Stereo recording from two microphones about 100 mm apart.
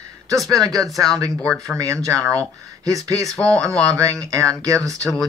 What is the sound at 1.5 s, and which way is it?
Speech, 5° left (ahead or behind).